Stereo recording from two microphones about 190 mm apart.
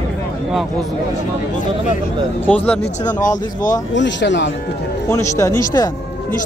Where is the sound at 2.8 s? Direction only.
40° left (ahead or behind).